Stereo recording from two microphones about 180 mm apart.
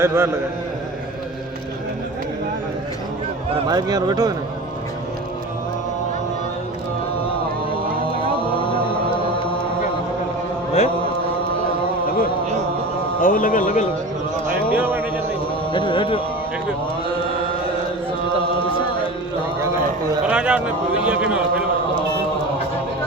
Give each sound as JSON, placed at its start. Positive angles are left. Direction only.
{"t": 0.0, "sound": "a man's voice", "side_deg": -15}
{"t": 3.7, "sound": "speech", "side_deg": -20}
{"t": 13.2, "sound": "speech", "side_deg": 50}
{"t": 14.7, "sound": "a sound", "side_deg": -10}
{"t": 15.7, "sound": "speech", "side_deg": 25}
{"t": 20.2, "sound": "a man's voice", "side_deg": -5}